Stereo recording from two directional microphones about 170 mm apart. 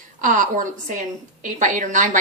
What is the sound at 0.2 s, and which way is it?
Speech, 50° right (ahead or behind).